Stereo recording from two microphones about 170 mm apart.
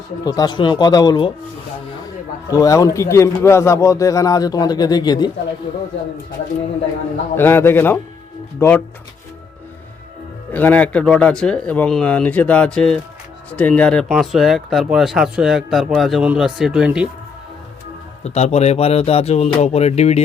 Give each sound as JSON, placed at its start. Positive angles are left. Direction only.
{"t": 0.3, "sound": "a man's voice", "side_deg": 25}
{"t": 2.5, "sound": "a man's voice", "side_deg": 20}
{"t": 7.3, "sound": "speech", "side_deg": 15}
{"t": 10.5, "sound": "speech", "side_deg": 10}
{"t": 18.2, "sound": "speech", "side_deg": 40}